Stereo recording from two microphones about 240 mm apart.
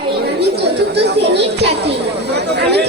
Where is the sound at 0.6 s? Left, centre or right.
Right.